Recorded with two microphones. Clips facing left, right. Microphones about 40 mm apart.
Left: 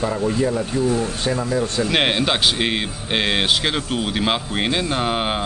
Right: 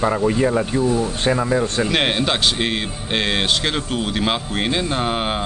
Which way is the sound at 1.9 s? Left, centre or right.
Centre.